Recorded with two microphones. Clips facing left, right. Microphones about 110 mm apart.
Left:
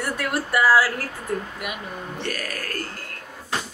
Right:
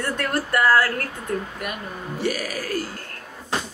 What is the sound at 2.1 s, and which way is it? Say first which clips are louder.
Speech: right 6 dB; 10° right (ahead or behind).